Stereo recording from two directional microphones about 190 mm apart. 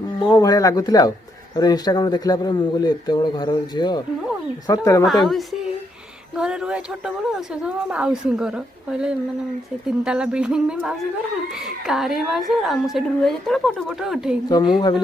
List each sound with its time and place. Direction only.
0.2 s speech: 20° left (ahead or behind)
5.0 s a woman's voice: centre (ahead or behind)
14.5 s speech: 25° left (ahead or behind)